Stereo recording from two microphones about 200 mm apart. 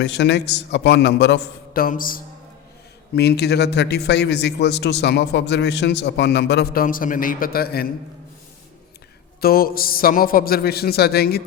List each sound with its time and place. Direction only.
0.0 s a man's voice: 60° left (ahead or behind)
9.4 s speech: 45° left (ahead or behind)